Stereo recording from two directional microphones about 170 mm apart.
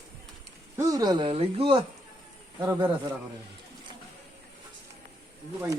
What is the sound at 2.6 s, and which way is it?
Speech, 15° right (ahead or behind).